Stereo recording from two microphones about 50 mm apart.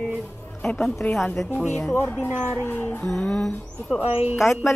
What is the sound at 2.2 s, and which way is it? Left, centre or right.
Speech, right.